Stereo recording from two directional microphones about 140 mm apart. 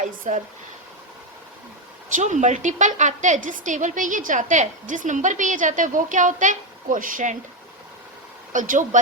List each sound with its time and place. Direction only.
0.0 s a woman's voice: 60° right (ahead or behind)
2.1 s a woman's voice: 60° right (ahead or behind)
8.5 s speech: 70° right (ahead or behind)